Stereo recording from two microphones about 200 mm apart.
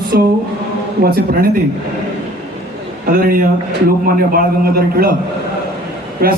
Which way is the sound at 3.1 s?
45° right (ahead or behind).